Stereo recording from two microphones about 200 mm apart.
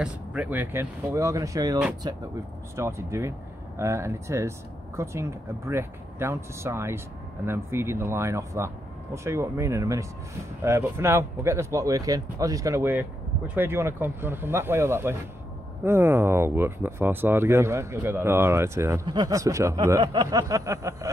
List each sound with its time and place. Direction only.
0.0 s speech: 5° right (ahead or behind)